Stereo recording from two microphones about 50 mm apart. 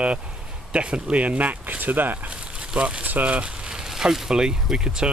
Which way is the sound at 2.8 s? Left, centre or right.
Right.